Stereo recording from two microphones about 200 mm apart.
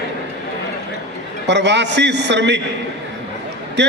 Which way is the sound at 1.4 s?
60° right (ahead or behind).